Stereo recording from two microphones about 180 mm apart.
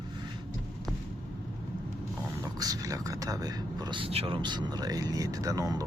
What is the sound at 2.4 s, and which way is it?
Speech, 20° right (ahead or behind).